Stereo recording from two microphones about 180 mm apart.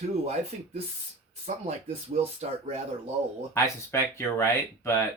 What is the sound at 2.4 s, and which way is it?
Speech, 35° right (ahead or behind).